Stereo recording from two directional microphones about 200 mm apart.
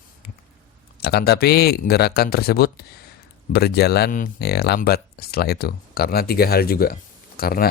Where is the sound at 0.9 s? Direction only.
50° left (ahead or behind).